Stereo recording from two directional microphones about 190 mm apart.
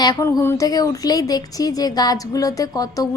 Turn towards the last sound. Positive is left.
turn(degrees=20)  # may be behind; listen again after turning